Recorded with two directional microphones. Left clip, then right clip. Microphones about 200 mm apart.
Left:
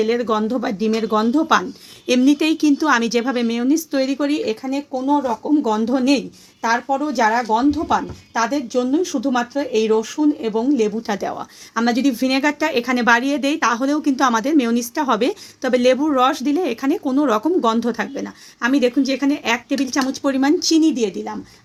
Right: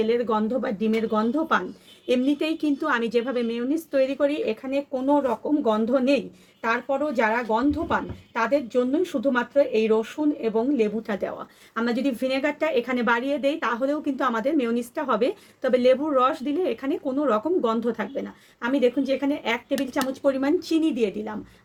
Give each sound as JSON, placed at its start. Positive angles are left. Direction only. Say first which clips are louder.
{"t": 0.0, "sound": "a woman's voice", "louder": "left 4 dB", "side_deg": 45}